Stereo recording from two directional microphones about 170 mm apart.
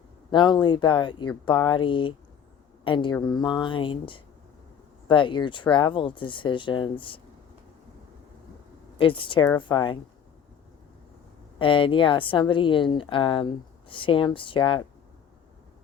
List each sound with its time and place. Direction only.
0.3 s a woman's voice: 30° left (ahead or behind)
9.0 s a woman's voice: 30° left (ahead or behind)
11.6 s a woman's voice: 30° left (ahead or behind)